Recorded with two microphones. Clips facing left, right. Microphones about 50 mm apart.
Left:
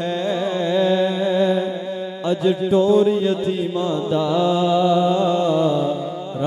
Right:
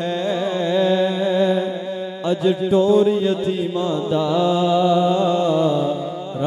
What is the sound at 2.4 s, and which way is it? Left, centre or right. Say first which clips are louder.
Mantra: even; right.